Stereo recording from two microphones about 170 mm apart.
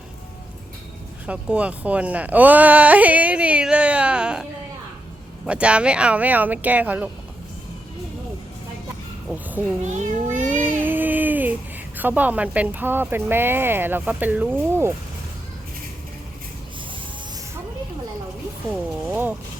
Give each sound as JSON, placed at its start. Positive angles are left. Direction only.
{"t": 1.3, "sound": "speech", "side_deg": -5}
{"t": 5.5, "sound": "speech", "side_deg": -5}
{"t": 9.8, "sound": "music", "side_deg": -45}
{"t": 10.8, "sound": "a sound", "side_deg": -10}
{"t": 11.9, "sound": "speech", "side_deg": -10}
{"t": 18.7, "sound": "speech", "side_deg": -10}